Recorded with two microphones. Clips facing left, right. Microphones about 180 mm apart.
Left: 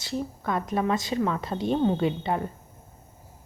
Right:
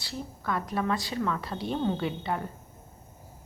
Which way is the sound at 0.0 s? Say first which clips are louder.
Left 6 dB; 20° left (ahead or behind).